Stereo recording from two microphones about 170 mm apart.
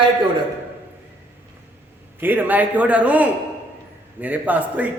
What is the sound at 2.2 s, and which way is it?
A man's voice, 10° right (ahead or behind).